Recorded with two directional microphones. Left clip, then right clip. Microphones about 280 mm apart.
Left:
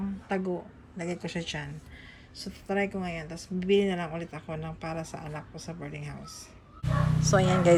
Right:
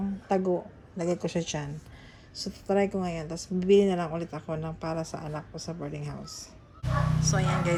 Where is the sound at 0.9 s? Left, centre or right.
Right.